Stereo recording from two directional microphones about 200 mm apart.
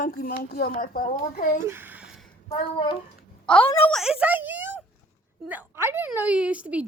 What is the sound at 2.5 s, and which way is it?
Speech, 25° left (ahead or behind).